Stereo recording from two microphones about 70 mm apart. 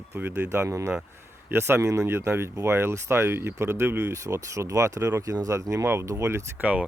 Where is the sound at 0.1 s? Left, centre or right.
Right.